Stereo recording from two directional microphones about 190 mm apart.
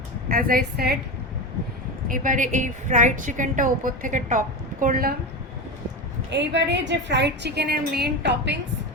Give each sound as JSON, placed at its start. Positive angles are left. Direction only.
{"t": 0.3, "sound": "a woman's voice", "side_deg": -50}
{"t": 2.0, "sound": "a woman's voice", "side_deg": -45}
{"t": 6.3, "sound": "a woman's voice", "side_deg": -65}